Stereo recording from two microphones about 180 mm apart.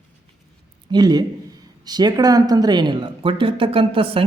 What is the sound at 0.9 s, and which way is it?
Speech, 20° right (ahead or behind).